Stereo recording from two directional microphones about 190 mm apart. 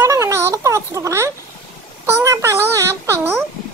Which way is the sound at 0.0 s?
15° right (ahead or behind).